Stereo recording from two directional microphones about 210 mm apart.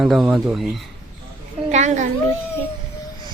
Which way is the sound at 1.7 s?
35° right (ahead or behind).